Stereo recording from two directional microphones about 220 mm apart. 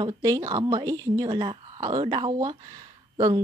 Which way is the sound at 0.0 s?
15° right (ahead or behind).